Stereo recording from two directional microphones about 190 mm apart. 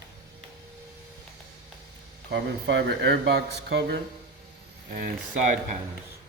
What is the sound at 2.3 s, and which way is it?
Speech, 65° right (ahead or behind).